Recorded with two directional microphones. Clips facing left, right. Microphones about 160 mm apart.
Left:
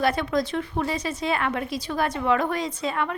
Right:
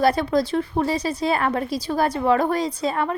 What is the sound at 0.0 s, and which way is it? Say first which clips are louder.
Speech: right 4 dB; 35° right (ahead or behind).